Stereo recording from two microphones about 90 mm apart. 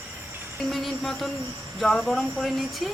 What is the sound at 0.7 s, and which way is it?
Cricket, centre (ahead or behind).